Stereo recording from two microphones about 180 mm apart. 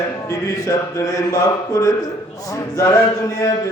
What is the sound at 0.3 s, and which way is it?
Mantra, 20° left (ahead or behind).